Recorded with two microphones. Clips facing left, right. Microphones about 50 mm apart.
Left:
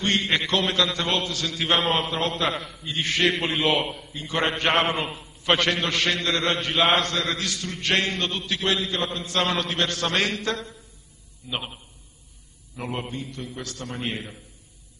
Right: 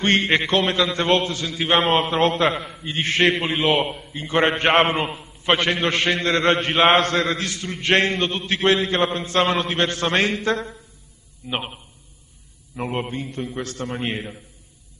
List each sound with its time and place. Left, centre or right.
0.0 s a man's voice: right
1.4 s a man's voice: centre
1.8 s a man's voice: right
3.3 s a man's voice: centre
4.1 s a man's voice: right
5.0 s a man's voice: centre
5.9 s a man's voice: right
11.4 s a man's voice: right
13.1 s a man's voice: right
13.9 s a man's voice: right